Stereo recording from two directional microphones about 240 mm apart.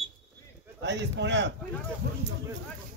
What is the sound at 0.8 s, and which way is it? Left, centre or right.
Speech, right.